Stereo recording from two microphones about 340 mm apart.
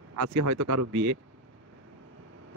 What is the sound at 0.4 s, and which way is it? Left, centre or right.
Speech, right.